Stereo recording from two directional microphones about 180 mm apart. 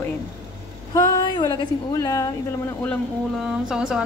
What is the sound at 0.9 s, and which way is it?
Speech, 20° left (ahead or behind).